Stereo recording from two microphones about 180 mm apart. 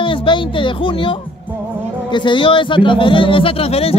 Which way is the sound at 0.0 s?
30° left (ahead or behind).